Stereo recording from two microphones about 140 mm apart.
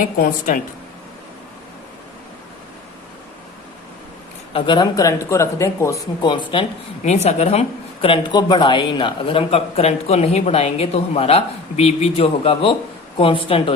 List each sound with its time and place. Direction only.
0.2 s speech: 80° left
4.5 s a man's voice: 35° left (ahead or behind)
6.2 s speech: 35° left (ahead or behind)
7.0 s a man's voice: 55° left (ahead or behind)
8.0 s a man's voice: 35° left (ahead or behind)